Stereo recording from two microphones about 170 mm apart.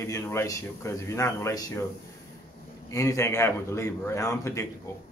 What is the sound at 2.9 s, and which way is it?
Speech, 20° left (ahead or behind).